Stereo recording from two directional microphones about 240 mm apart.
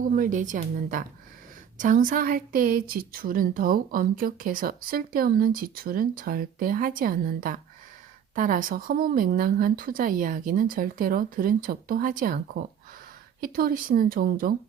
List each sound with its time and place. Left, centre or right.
0.0 s a woman's voice: right